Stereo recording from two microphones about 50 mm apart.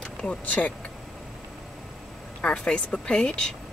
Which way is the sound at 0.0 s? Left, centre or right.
Left.